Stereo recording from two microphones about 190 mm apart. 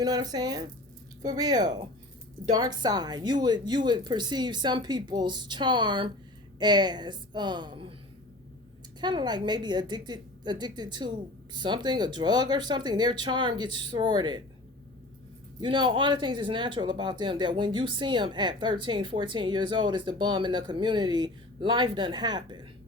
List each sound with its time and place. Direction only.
0.0 s speech: 20° right (ahead or behind)
9.0 s speech: 25° right (ahead or behind)
15.6 s speech: 25° right (ahead or behind)